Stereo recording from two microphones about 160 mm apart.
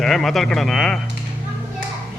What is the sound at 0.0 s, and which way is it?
Speech, centre (ahead or behind).